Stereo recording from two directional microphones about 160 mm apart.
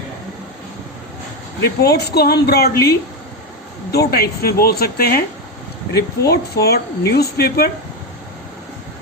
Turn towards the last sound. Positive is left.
turn(degrees=80)